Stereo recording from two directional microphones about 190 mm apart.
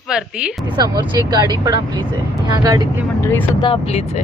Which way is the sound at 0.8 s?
20° right (ahead or behind).